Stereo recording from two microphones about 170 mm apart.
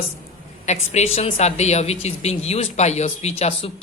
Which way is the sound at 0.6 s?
40° left (ahead or behind).